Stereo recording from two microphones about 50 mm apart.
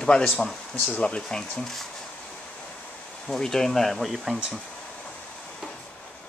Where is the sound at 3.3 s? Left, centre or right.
Centre.